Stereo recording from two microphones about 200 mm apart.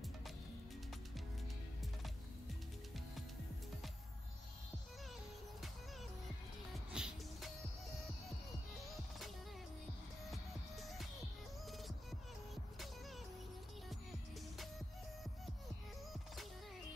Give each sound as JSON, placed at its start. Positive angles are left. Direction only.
{"t": 6.9, "sound": "music", "side_deg": -5}
{"t": 10.3, "sound": "music", "side_deg": 0}